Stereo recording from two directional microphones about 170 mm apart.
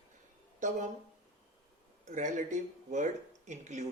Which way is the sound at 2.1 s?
45° right (ahead or behind).